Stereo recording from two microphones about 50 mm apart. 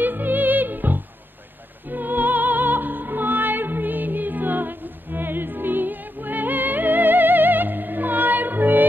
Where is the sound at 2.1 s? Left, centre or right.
Right.